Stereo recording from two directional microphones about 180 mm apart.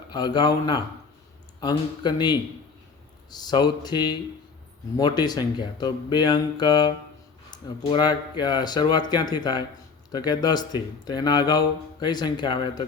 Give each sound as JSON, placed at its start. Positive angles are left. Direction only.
{"t": 0.1, "sound": "speech", "side_deg": 25}